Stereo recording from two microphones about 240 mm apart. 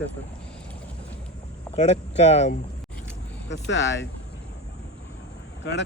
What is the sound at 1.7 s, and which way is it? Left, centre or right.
Speech, left.